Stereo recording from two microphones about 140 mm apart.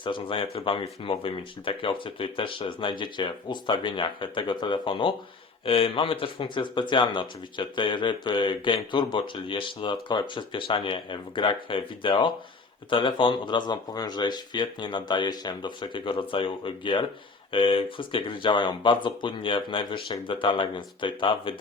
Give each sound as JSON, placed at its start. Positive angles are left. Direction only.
{"t": 0.0, "sound": "speech", "side_deg": 35}